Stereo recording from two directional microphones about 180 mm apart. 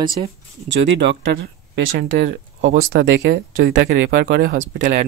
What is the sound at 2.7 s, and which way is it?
Speech, 55° right (ahead or behind).